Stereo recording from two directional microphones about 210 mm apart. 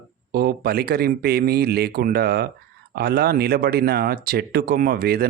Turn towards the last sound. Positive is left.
turn(degrees=-45)  # may be behind; listen again after turning